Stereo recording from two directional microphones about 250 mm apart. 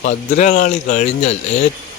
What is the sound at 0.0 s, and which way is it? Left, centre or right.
Speech, left.